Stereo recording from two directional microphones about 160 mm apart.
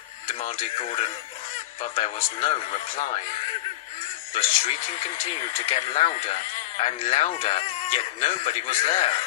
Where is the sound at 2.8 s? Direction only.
50° left (ahead or behind).